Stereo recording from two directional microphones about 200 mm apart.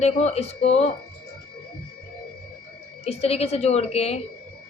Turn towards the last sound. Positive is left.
turn(degrees=30)  # may be behind; listen again after turning